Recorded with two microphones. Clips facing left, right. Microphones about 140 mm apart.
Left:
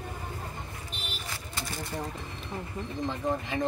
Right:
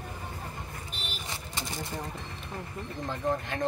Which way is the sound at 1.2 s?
20° right (ahead or behind).